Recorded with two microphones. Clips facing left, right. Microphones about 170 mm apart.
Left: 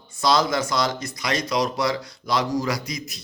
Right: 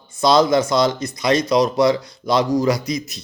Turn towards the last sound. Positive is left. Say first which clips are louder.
# right 6 dB
turn(degrees=-25)  # may be behind; listen again after turning